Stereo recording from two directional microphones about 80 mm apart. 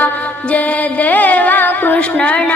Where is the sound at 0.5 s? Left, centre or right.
Centre.